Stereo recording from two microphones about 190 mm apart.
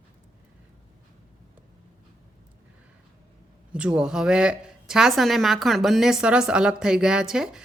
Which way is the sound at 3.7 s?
5° right (ahead or behind).